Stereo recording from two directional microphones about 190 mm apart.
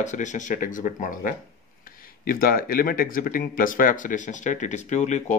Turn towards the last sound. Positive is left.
turn(degrees=40)  # may be behind; listen again after turning